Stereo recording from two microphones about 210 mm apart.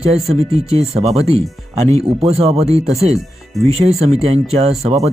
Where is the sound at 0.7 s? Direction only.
30° right (ahead or behind).